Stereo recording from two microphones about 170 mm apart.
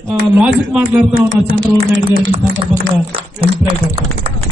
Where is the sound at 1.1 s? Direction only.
75° right (ahead or behind).